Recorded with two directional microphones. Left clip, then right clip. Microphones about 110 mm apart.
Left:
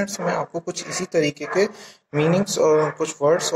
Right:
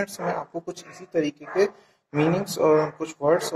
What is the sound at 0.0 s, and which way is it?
Speech, 25° left (ahead or behind).